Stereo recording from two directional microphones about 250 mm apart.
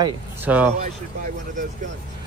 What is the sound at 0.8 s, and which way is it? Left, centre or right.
Speech, right.